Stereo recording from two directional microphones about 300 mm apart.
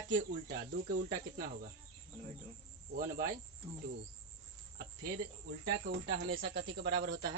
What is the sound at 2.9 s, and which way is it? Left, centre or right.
Speech, right.